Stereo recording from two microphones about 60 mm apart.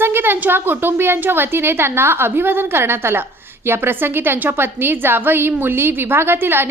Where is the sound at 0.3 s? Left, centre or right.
Right.